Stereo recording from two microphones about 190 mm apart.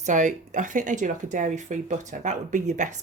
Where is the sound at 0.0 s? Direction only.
40° right (ahead or behind).